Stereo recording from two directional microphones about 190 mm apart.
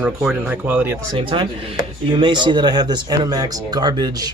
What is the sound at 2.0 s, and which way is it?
Speech, 25° right (ahead or behind).